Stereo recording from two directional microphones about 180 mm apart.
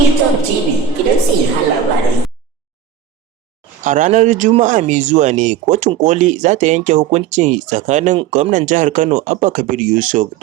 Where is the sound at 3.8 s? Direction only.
45° right (ahead or behind).